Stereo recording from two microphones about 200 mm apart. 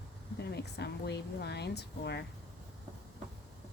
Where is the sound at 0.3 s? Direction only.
55° left (ahead or behind).